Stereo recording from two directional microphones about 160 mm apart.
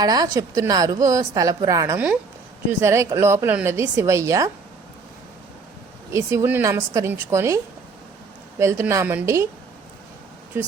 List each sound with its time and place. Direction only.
0.0 s a woman's voice: 25° right (ahead or behind)
6.1 s a woman's voice: 15° right (ahead or behind)